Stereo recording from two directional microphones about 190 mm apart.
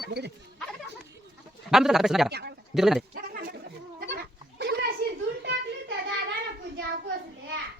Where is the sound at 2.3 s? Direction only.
55° right (ahead or behind).